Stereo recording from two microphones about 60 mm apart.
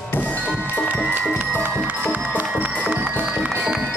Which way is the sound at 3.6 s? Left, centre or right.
Centre.